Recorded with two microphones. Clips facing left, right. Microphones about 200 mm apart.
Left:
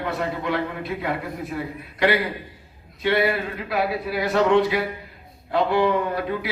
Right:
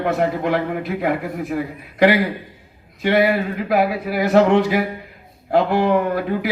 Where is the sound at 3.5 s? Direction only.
45° right (ahead or behind).